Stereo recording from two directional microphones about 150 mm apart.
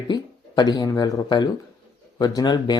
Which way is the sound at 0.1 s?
30° left (ahead or behind).